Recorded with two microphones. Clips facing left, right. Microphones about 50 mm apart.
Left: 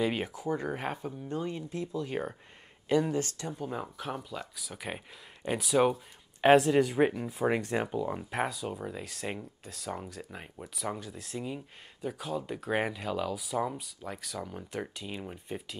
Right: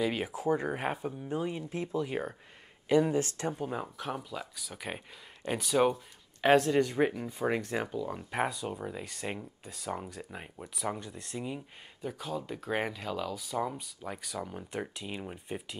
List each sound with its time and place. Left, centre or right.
0.0 s speech: centre
0.3 s speech: centre
1.6 s speech: right
2.0 s speech: centre
2.9 s speech: centre
3.6 s speech: centre